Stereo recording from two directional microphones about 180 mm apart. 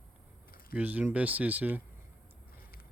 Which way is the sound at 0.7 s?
10° right (ahead or behind).